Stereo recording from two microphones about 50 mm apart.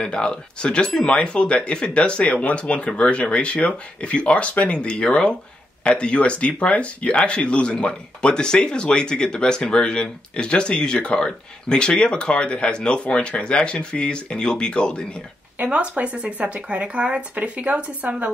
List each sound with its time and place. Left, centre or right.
0.0 s speech: centre
15.6 s speech: right